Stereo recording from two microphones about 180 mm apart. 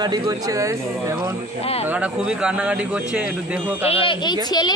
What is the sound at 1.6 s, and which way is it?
Speech, 35° left (ahead or behind).